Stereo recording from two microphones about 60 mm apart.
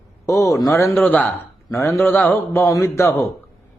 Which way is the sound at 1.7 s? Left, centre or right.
Left.